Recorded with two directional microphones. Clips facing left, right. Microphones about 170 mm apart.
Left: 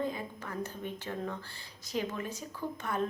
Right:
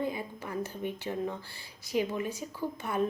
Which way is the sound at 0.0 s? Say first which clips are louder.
Right 2 dB; 10° right (ahead or behind).